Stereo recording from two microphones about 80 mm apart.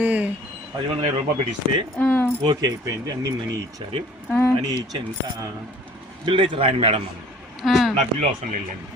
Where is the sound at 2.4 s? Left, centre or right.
Right.